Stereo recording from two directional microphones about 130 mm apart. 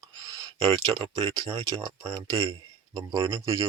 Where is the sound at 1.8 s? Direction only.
30° right (ahead or behind).